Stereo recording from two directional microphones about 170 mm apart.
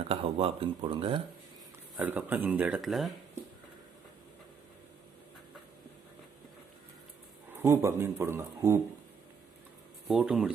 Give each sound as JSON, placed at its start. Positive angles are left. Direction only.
{"t": 0.1, "sound": "speech", "side_deg": -35}
{"t": 2.0, "sound": "speech", "side_deg": -10}
{"t": 7.5, "sound": "speech", "side_deg": -15}
{"t": 10.1, "sound": "speech", "side_deg": -5}